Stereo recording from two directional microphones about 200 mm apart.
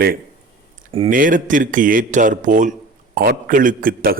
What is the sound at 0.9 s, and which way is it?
Speech, 25° right (ahead or behind).